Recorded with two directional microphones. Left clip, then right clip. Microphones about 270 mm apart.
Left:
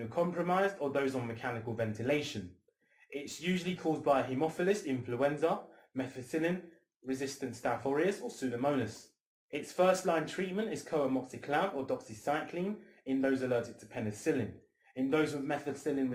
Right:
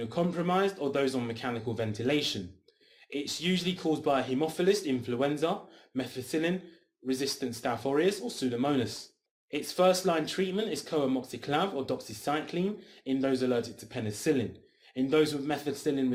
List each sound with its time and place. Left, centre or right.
0.1 s speech: right